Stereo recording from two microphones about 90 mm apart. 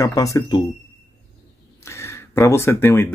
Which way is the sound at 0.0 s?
35° left (ahead or behind).